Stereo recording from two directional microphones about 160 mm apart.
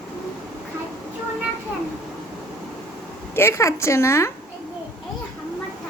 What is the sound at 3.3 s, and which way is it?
Speech, 15° left (ahead or behind).